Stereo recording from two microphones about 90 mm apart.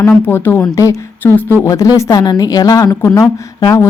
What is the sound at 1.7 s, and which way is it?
A woman's voice, 40° left (ahead or behind).